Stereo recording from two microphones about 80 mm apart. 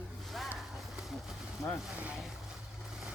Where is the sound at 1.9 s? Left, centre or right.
Centre.